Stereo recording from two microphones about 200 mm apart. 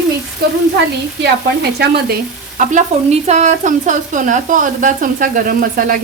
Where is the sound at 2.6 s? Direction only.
35° right (ahead or behind).